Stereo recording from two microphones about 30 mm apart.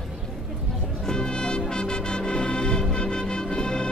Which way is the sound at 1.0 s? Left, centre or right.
Left.